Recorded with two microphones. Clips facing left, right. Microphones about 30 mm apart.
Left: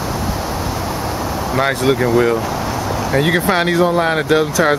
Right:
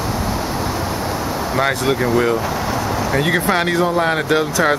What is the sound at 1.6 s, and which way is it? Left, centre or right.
Speech, centre.